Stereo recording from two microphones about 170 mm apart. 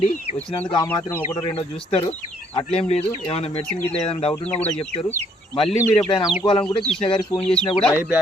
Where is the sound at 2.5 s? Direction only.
35° left (ahead or behind).